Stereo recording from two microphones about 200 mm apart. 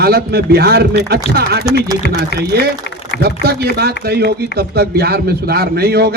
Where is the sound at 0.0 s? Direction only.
50° right (ahead or behind).